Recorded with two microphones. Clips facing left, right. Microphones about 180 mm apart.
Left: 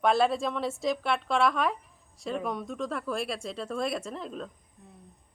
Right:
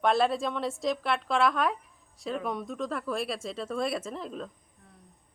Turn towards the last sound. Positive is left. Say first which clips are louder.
# even
turn(degrees=0)  # may be behind; listen again after turning